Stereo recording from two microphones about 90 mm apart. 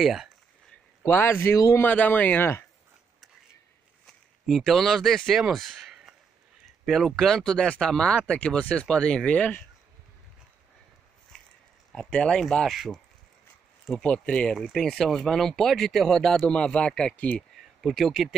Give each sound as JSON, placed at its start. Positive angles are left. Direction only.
{"t": 0.0, "sound": "speech", "side_deg": -5}
{"t": 1.0, "sound": "speech", "side_deg": 25}
{"t": 4.5, "sound": "speech", "side_deg": 0}
{"t": 5.5, "sound": "a sound", "side_deg": 0}
{"t": 6.9, "sound": "speech", "side_deg": 5}
{"t": 11.9, "sound": "speech", "side_deg": 5}
{"t": 14.0, "sound": "speech", "side_deg": 15}
{"t": 17.8, "sound": "speech", "side_deg": 0}